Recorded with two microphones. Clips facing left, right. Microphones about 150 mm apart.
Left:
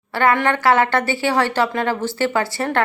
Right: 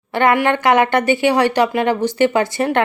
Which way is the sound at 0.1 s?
20° right (ahead or behind).